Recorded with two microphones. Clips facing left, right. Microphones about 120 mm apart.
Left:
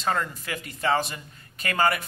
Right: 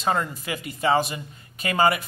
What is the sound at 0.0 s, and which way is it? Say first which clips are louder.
A man's voice: right 2 dB; 15° right (ahead or behind).